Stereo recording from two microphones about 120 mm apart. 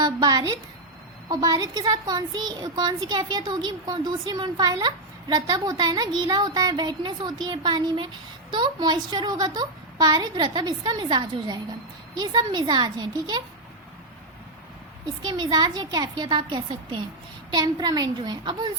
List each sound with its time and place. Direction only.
0.0 s a woman's voice: 35° right (ahead or behind)
15.2 s speech: 40° right (ahead or behind)